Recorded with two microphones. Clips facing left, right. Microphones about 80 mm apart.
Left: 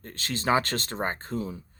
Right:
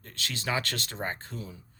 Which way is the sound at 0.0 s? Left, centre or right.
Left.